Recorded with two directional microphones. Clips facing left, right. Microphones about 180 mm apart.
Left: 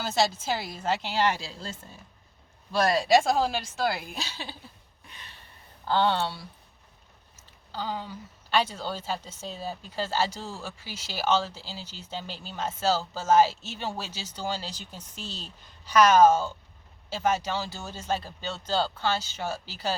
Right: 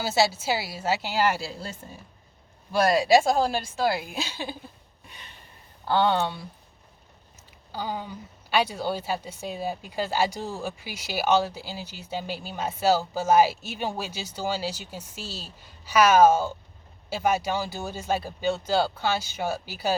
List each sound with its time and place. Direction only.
0.0 s a woman's voice: 5° right (ahead or behind)
5.9 s a woman's voice: 15° right (ahead or behind)
7.7 s a woman's voice: 15° right (ahead or behind)